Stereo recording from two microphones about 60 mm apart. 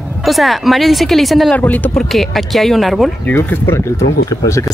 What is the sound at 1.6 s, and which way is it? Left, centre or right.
Speech, left.